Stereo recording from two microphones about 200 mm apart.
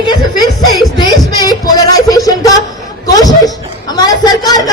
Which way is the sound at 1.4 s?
20° left (ahead or behind).